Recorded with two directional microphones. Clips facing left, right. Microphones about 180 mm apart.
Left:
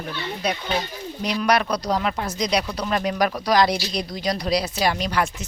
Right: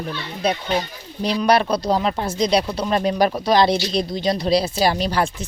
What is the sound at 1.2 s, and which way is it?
Speech, 30° right (ahead or behind).